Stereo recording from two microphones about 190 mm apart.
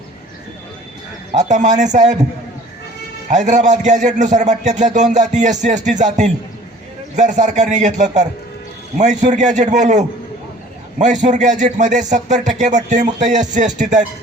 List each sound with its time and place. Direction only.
1.3 s a man's voice: 40° right (ahead or behind)
3.2 s a man's voice: 40° right (ahead or behind)